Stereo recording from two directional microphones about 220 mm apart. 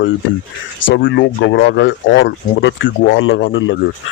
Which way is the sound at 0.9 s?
50° left (ahead or behind).